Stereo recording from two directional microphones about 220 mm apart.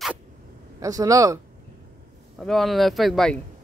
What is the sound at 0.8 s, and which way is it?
Speech, 15° right (ahead or behind).